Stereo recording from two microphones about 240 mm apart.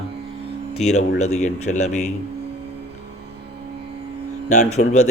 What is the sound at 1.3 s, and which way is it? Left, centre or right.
Speech, left.